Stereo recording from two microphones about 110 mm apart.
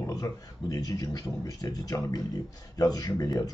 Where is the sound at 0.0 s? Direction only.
35° left (ahead or behind).